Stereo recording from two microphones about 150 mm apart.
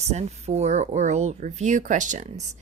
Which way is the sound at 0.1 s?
45° right (ahead or behind).